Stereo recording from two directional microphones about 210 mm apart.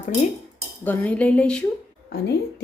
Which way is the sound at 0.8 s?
10° left (ahead or behind).